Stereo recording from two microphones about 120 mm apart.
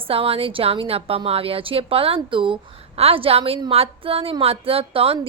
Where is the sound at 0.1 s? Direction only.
50° right (ahead or behind).